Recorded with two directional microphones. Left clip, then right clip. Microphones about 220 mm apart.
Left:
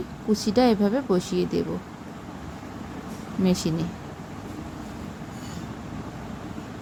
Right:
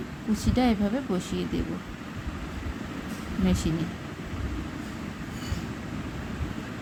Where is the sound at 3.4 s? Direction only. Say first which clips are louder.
Left 4 dB; 15° left (ahead or behind).